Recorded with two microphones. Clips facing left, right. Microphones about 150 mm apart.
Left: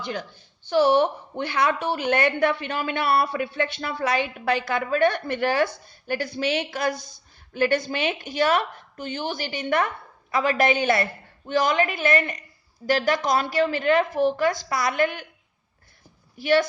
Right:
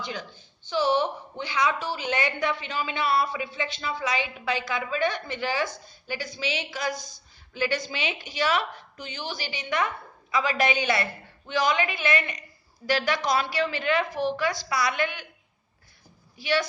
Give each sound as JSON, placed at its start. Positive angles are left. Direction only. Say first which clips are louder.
{"t": 0.0, "sound": "a woman's voice", "louder": "left 4 dB", "side_deg": 55}
{"t": 16.4, "sound": "a woman's voice", "louder": "left 6 dB", "side_deg": 50}